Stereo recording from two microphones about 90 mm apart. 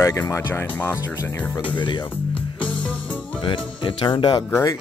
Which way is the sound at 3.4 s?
65° left (ahead or behind).